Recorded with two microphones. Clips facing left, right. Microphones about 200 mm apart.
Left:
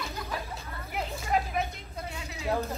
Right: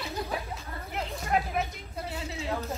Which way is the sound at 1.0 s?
Centre (ahead or behind).